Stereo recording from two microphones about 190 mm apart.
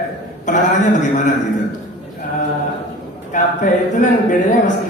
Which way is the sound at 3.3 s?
40° left (ahead or behind).